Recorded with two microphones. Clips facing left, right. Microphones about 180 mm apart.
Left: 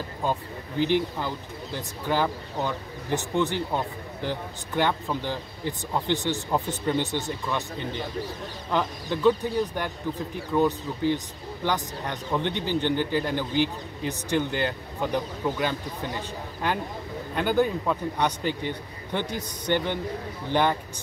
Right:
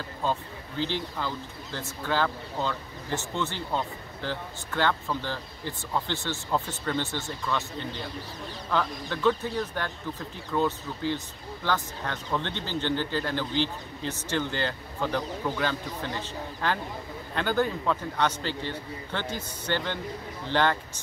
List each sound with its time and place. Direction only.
0.2 s speech: 15° left (ahead or behind)